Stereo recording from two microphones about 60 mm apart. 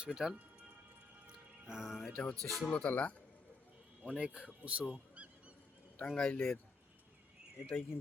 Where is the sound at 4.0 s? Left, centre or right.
Centre.